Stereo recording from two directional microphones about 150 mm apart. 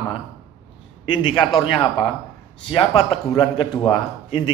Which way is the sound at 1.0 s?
35° left (ahead or behind).